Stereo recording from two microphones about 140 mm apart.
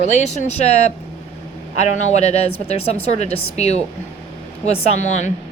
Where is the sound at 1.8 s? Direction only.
55° left (ahead or behind).